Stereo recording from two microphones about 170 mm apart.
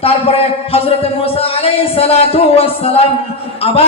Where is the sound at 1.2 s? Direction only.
35° left (ahead or behind).